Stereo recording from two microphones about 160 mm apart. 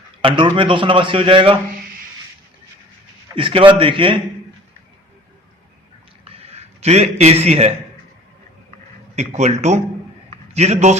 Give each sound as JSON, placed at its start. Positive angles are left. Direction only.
{"t": 0.2, "sound": "a man's voice", "side_deg": -30}
{"t": 3.3, "sound": "a man's voice", "side_deg": -35}
{"t": 6.2, "sound": "a sound", "side_deg": -40}
{"t": 9.1, "sound": "speech", "side_deg": -45}